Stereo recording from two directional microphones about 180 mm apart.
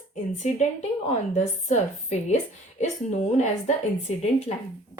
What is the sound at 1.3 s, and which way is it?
A woman's voice, 40° left (ahead or behind).